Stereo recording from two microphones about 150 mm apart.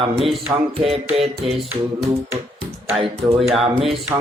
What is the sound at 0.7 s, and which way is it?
Music, 40° right (ahead or behind).